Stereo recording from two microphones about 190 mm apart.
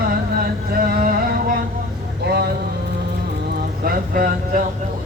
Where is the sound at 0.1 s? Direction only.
50° right (ahead or behind).